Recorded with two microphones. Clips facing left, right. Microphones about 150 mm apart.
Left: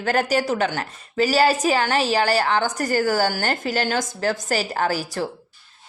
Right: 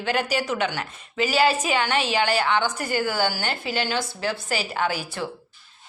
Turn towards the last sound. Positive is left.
turn(degrees=40)  # may be behind; listen again after turning